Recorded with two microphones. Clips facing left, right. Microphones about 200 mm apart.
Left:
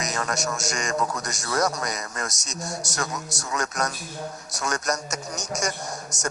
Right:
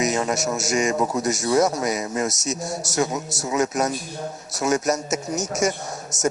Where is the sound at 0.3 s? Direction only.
5° right (ahead or behind).